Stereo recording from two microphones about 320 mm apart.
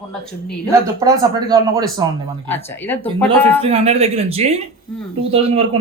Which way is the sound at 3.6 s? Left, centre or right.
Centre.